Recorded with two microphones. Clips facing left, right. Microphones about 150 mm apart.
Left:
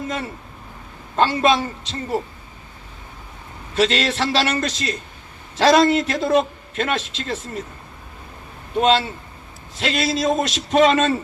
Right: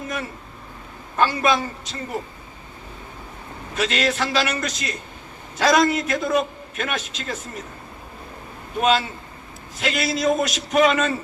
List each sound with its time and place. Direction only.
1.1 s a man's voice: 25° left (ahead or behind)
3.8 s a man's voice: 30° left (ahead or behind)
8.8 s a man's voice: 30° left (ahead or behind)